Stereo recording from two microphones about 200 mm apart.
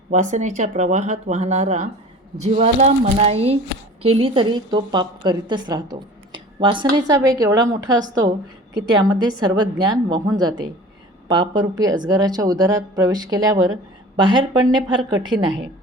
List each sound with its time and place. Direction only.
0.1 s a woman's voice: 40° right (ahead or behind); by 15.6 s 20° right (ahead or behind)